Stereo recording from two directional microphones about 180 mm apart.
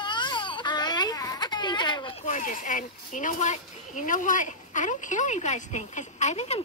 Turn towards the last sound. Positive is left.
turn(degrees=40)  # may be behind; listen again after turning